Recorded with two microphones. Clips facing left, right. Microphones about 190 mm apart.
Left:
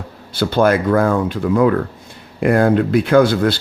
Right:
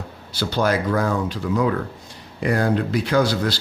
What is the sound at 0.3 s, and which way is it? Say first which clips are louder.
Speech: left 6 dB; 55° left (ahead or behind).